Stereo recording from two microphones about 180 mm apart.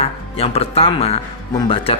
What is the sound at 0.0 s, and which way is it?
Speech, 35° left (ahead or behind).